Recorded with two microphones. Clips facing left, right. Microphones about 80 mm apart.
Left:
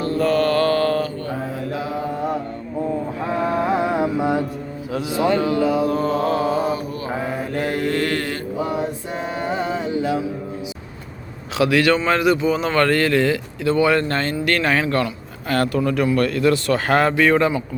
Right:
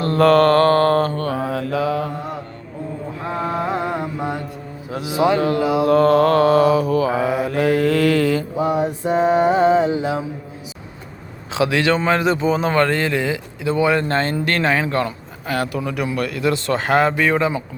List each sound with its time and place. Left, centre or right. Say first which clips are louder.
0.0 s mantra: right 5 dB; right
1.1 s mantra: right 5 dB; right
3.8 s mantra: left 4 dB; centre
5.0 s speech: right 2 dB; centre
5.8 s mantra: right 6 dB; right
8.5 s mantra: right 4 dB; right
11.5 s speech: left 1 dB; right